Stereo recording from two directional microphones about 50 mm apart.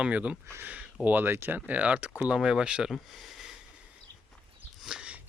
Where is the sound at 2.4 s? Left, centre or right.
Centre.